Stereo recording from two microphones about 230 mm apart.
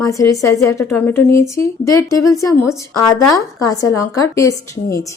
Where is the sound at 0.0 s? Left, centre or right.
Centre.